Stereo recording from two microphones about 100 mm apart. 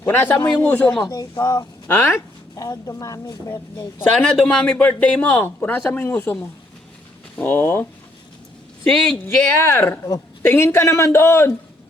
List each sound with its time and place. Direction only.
0.0 s a man's voice: 20° left (ahead or behind)
1.0 s speech: 40° left (ahead or behind)
1.9 s a man's voice: 25° left (ahead or behind)
2.6 s speech: 35° left (ahead or behind)
4.2 s a man's voice: 10° left (ahead or behind)
7.3 s a man's voice: 15° left (ahead or behind)
8.8 s a man's voice: 5° left (ahead or behind)
9.6 s a man's voice: 20° left (ahead or behind)